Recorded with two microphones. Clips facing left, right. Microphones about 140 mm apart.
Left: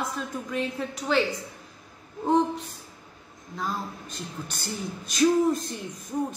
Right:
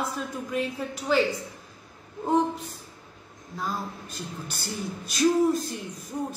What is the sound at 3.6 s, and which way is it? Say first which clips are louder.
A woman's voice: even; 5° right (ahead or behind).